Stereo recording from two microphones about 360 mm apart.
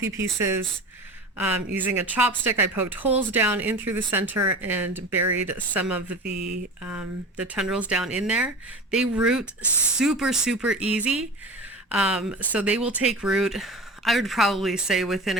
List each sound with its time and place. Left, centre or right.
0.0 s speech: centre
5.1 s speech: right
5.5 s speech: centre
6.1 s speech: right
7.4 s speech: centre